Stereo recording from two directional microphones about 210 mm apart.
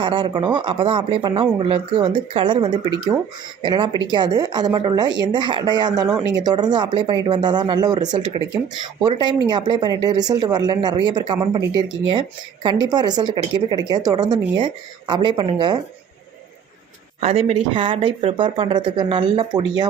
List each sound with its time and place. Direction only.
0.0 s speech: 25° right (ahead or behind)
12.6 s speech: 20° right (ahead or behind)
17.2 s speech: 30° right (ahead or behind)